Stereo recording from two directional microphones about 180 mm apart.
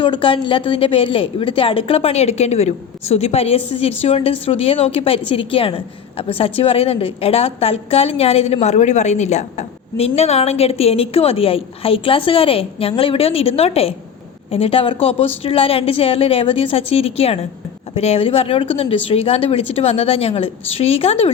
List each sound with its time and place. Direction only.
0.0 s a woman's voice: 30° left (ahead or behind)